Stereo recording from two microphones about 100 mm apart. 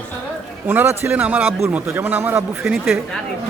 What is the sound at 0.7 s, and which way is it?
A man's voice, 20° right (ahead or behind).